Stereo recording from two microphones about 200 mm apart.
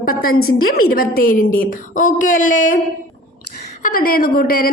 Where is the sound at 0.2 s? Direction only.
90° left.